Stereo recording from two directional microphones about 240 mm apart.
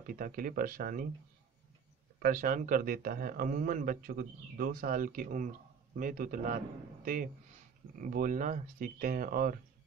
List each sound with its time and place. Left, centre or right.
0.0 s speech: right
2.2 s speech: right
8.0 s speech: right